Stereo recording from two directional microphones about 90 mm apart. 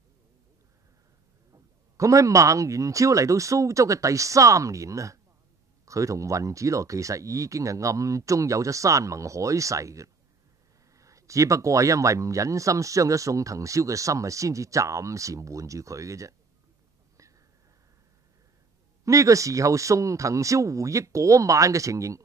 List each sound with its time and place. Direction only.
1.5 s speech: 35° right (ahead or behind)
19.0 s speech: 35° right (ahead or behind)